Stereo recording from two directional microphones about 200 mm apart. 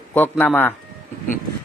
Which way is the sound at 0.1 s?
10° left (ahead or behind).